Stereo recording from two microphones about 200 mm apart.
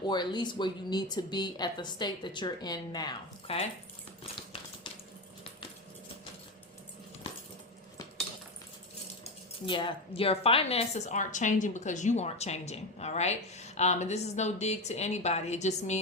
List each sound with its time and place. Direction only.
0.0 s speech: 20° left (ahead or behind)
9.6 s speech: 25° left (ahead or behind)